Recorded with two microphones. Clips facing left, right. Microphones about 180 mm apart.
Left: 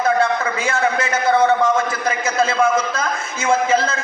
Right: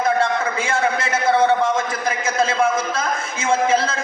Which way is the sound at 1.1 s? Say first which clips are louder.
Left 1 dB; 30° right (ahead or behind).